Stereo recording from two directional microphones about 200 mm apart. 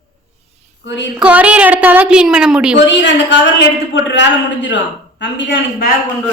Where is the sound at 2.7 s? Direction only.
60° left (ahead or behind).